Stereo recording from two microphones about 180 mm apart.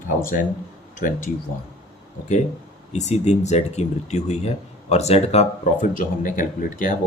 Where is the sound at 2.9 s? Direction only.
40° left (ahead or behind).